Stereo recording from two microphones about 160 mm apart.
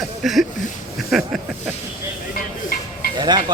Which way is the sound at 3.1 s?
25° right (ahead or behind).